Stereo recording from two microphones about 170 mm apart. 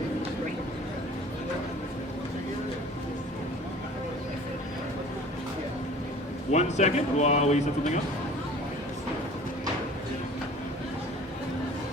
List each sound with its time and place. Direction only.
6.5 s speech: 40° left (ahead or behind)